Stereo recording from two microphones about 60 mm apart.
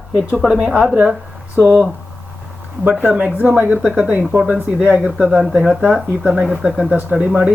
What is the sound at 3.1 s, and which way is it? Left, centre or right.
Speech, right.